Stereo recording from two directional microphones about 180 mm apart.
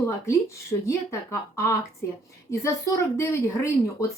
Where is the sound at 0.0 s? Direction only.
15° left (ahead or behind).